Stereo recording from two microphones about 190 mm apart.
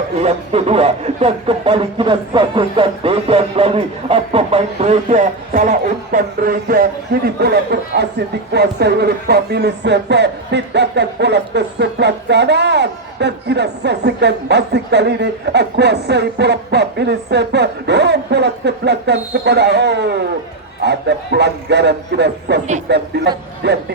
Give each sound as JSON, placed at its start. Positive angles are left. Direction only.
{"t": 0.2, "sound": "speech", "side_deg": -35}